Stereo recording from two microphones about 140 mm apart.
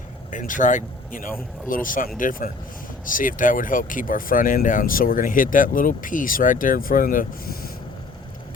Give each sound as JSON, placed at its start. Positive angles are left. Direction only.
{"t": 0.3, "sound": "speech", "side_deg": 65}